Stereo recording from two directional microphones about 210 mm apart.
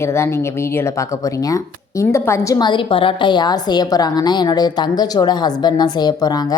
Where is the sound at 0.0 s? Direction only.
10° left (ahead or behind).